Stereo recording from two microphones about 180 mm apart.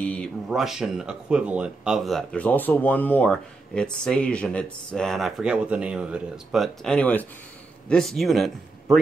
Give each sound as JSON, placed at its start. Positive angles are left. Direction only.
{"t": 0.0, "sound": "speech", "side_deg": 5}